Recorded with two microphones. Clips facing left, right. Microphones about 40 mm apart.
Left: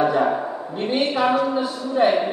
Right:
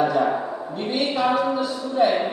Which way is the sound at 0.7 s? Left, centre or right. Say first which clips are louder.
Left 3 dB; centre.